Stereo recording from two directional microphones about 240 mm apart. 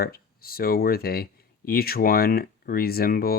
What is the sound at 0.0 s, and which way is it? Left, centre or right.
Speech, left.